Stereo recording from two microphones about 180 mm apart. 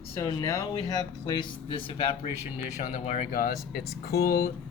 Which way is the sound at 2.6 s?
45° left (ahead or behind).